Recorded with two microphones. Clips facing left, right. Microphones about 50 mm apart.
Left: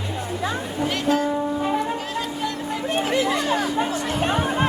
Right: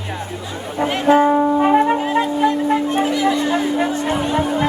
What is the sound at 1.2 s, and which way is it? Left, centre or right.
Music, right.